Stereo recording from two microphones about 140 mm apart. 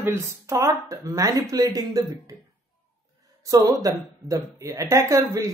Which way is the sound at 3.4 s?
25° right (ahead or behind).